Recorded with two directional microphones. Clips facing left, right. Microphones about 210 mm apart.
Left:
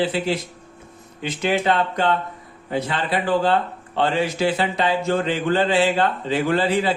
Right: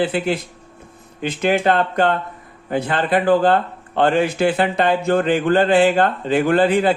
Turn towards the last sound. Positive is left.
turn(degrees=-55)  # may be behind; listen again after turning